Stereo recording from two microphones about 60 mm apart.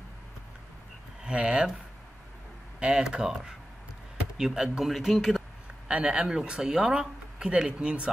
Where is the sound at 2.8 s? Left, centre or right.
Centre.